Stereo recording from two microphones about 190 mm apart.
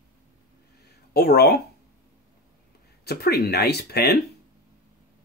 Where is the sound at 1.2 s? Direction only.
60° left (ahead or behind).